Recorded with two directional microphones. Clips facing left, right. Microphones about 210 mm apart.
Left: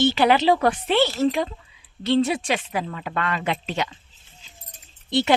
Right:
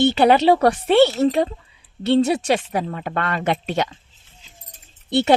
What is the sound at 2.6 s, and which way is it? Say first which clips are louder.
Speech: right 4 dB; 40° right (ahead or behind).